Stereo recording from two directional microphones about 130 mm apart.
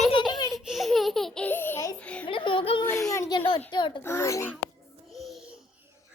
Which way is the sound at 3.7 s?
40° left (ahead or behind).